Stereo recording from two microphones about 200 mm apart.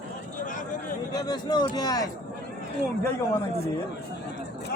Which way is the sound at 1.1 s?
20° left (ahead or behind).